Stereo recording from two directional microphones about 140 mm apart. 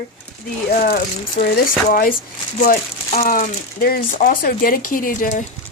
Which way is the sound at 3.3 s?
85° left.